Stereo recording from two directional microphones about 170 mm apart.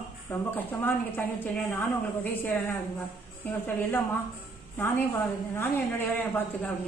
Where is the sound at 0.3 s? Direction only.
10° left (ahead or behind).